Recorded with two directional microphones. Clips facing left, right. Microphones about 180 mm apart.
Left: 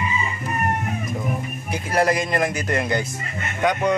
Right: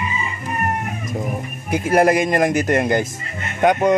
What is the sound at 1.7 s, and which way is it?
Speech, 50° right (ahead or behind).